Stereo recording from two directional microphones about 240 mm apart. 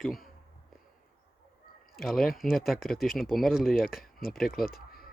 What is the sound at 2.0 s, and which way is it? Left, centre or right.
Speech, centre.